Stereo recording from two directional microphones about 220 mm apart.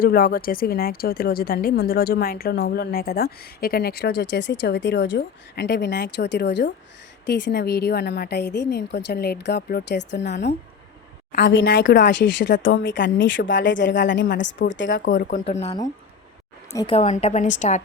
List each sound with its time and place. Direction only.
0.0 s a woman's voice: 45° left (ahead or behind)
15.1 s speech: 45° left (ahead or behind)
15.4 s speech: 30° left (ahead or behind)
16.7 s a woman's voice: 25° left (ahead or behind)